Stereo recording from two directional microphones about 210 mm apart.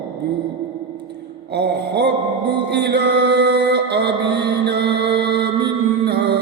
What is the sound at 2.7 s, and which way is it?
Music, 50° right (ahead or behind).